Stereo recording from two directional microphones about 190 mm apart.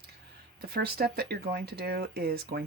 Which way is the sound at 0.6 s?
55° right (ahead or behind).